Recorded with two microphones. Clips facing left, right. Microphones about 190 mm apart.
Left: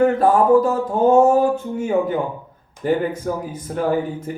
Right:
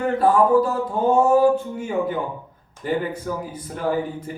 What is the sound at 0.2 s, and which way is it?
Music, 45° left (ahead or behind).